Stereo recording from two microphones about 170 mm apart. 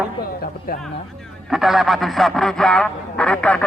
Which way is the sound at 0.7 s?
60° left (ahead or behind).